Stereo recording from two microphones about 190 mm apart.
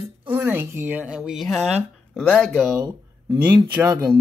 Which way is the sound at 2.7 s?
15° right (ahead or behind).